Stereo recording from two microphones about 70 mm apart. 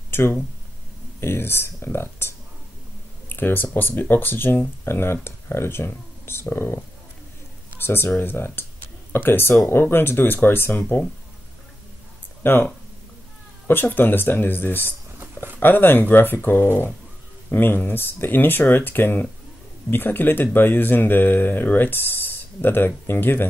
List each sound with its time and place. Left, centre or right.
0.1 s speech: left
12.4 s speech: left
13.7 s speech: left